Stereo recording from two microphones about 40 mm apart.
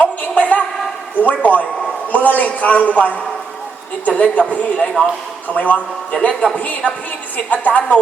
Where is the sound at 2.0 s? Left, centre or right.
Left.